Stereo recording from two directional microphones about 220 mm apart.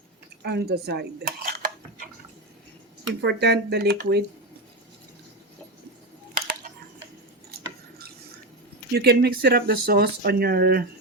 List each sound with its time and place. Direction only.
0.4 s dishes: 45° right (ahead or behind)
3.2 s speech: 50° right (ahead or behind)
7.5 s dishes: 45° right (ahead or behind)
8.9 s speech: 45° right (ahead or behind)